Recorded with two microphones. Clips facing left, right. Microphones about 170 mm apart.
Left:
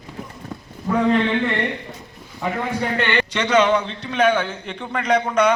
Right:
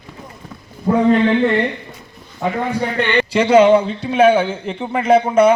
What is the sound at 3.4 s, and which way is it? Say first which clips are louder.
A man's voice: right 8 dB; 30° right (ahead or behind).